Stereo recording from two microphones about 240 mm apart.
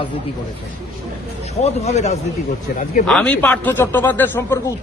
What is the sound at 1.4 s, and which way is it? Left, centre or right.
Speech, left.